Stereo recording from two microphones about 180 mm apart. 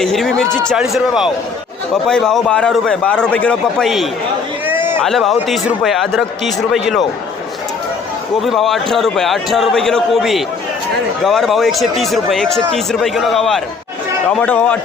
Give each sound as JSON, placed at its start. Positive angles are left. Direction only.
{"t": 0.0, "sound": "speech", "side_deg": 5}
{"t": 4.6, "sound": "a sound", "side_deg": -10}
{"t": 5.0, "sound": "speech", "side_deg": 0}
{"t": 8.4, "sound": "a man's voice", "side_deg": 0}